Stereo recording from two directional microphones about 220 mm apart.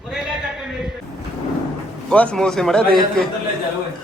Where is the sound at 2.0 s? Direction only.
5° left (ahead or behind).